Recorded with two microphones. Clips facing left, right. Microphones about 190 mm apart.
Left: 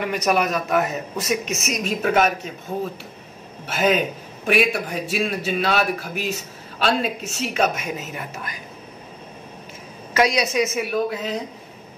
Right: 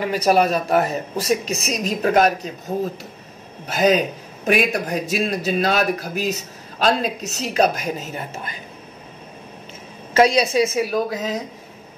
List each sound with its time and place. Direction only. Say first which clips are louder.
0.0 s a man's voice: right 4 dB; 30° right (ahead or behind)
10.1 s a man's voice: right 4 dB; 30° right (ahead or behind)